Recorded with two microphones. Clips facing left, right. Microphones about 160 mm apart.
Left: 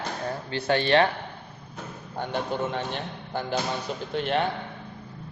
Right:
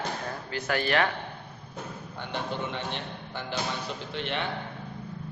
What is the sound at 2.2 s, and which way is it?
Speech, 45° left (ahead or behind).